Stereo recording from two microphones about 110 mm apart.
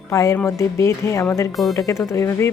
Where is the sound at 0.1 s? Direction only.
30° left (ahead or behind).